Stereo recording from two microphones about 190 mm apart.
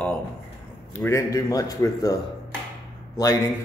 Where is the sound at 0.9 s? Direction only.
15° left (ahead or behind).